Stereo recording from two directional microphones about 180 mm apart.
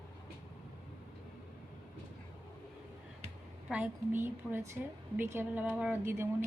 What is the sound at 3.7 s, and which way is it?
A woman's voice, 10° right (ahead or behind).